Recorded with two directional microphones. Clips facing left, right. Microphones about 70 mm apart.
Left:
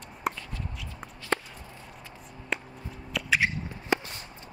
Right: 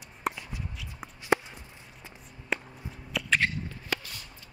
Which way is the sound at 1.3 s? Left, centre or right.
Centre.